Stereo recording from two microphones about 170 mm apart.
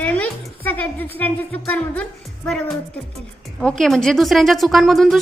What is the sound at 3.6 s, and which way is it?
A woman's voice, 5° left (ahead or behind).